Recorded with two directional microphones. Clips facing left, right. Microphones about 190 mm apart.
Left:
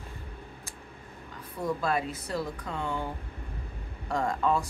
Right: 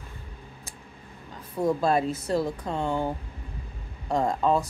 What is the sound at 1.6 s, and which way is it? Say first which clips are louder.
Speech: right 6 dB; 25° right (ahead or behind).